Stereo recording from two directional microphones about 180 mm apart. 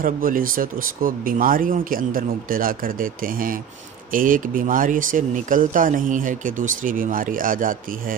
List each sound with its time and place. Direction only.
0.0 s speech: 50° right (ahead or behind)